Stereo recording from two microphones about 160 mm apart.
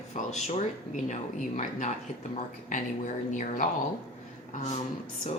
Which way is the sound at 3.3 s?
55° left (ahead or behind).